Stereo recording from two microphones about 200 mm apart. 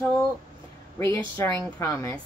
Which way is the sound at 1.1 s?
15° left (ahead or behind).